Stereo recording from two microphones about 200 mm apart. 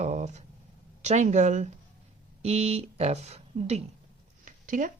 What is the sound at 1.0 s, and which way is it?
Speech, 35° right (ahead or behind).